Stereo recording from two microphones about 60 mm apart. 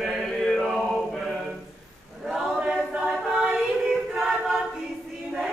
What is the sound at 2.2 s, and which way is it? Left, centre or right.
Choir, centre.